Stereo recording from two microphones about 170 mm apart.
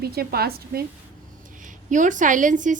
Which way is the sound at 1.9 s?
50° right (ahead or behind).